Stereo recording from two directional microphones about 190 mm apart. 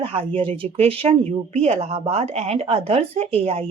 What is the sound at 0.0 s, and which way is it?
A woman's voice, 30° right (ahead or behind).